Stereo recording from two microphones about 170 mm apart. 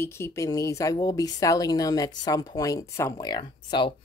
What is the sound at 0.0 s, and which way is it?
Speech, 15° left (ahead or behind).